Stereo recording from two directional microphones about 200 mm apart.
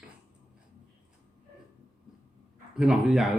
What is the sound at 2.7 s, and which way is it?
Speech, 5° right (ahead or behind).